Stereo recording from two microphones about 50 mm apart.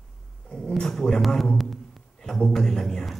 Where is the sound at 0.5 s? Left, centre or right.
Centre.